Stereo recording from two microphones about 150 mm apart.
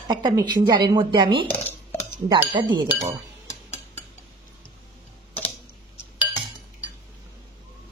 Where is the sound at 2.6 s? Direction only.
30° right (ahead or behind).